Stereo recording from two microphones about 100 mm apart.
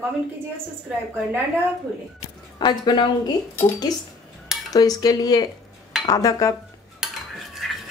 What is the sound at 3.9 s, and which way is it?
Cutlery, 40° left (ahead or behind).